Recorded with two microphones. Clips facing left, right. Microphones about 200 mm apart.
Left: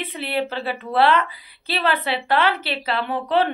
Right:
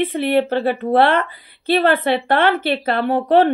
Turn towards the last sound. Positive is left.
turn(degrees=-45)  # may be behind; listen again after turning